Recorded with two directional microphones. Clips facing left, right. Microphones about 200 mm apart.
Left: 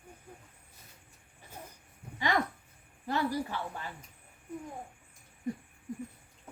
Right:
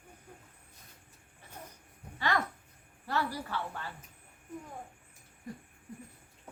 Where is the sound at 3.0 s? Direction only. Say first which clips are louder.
Left 3 dB; 15° left (ahead or behind).